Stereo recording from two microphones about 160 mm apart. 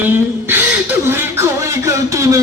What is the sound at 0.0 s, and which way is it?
Speech, 10° right (ahead or behind).